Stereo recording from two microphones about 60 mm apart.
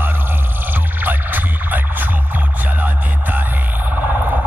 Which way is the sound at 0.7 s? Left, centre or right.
Right.